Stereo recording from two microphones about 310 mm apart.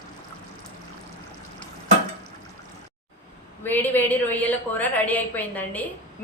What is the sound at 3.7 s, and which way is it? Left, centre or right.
A woman's voice, centre.